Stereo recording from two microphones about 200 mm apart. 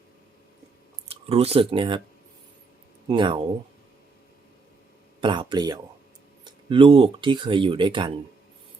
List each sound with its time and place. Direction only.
1.0 s speech: 30° right (ahead or behind)
3.1 s speech: 25° right (ahead or behind)
5.2 s speech: 25° right (ahead or behind)